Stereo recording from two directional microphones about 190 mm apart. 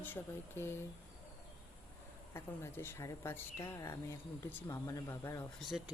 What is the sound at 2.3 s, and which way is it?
Speech, 15° left (ahead or behind).